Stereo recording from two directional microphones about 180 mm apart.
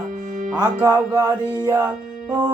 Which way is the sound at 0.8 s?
20° right (ahead or behind).